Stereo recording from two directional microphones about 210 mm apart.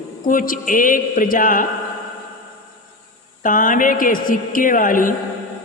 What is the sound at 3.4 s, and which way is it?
A man's voice, 40° left (ahead or behind).